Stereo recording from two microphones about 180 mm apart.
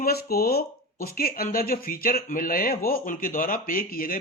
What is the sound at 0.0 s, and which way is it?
A man's voice, 60° left (ahead or behind).